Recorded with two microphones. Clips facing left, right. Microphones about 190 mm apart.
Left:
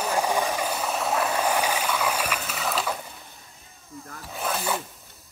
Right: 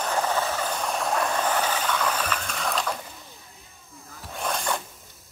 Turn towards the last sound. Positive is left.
turn(degrees=5)  # may be behind; listen again after turning